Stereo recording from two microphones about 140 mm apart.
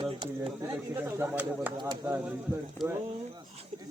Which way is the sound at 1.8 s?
30° right (ahead or behind).